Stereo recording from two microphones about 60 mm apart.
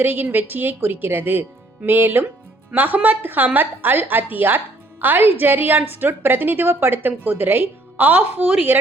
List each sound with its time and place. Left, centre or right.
0.0 s a woman's voice: right